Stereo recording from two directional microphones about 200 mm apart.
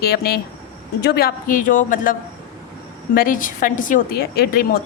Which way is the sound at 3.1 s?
40° left (ahead or behind).